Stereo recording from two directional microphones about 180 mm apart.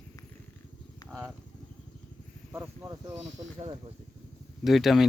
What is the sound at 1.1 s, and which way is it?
Speech, centre (ahead or behind).